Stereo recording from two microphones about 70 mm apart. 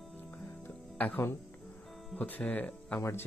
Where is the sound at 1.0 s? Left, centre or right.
Left.